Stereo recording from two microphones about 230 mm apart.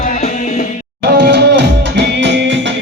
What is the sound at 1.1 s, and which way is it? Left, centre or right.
Music, right.